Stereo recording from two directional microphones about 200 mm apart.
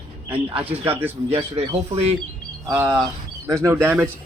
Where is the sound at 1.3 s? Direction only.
30° right (ahead or behind).